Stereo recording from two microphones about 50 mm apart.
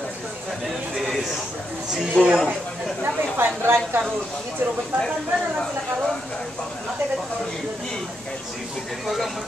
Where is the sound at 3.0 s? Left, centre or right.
Right.